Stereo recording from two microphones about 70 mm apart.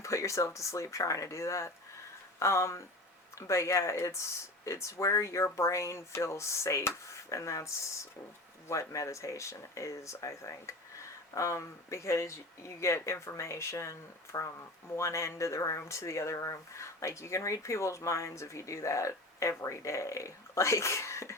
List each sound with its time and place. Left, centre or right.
0.0 s speech: left
14.3 s speech: left
14.9 s speech: left